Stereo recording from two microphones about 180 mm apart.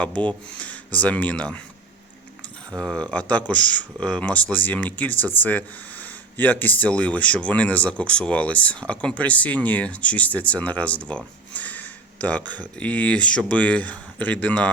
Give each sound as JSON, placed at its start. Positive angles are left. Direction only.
{"t": 0.0, "sound": "speech", "side_deg": 5}
{"t": 2.7, "sound": "speech", "side_deg": 5}